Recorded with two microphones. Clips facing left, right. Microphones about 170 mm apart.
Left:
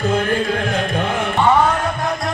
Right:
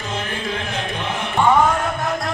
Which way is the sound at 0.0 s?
50° left (ahead or behind).